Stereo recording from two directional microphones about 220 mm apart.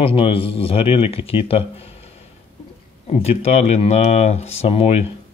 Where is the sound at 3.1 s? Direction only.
30° left (ahead or behind).